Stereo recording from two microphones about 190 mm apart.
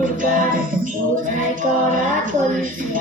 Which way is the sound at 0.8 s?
45° right (ahead or behind).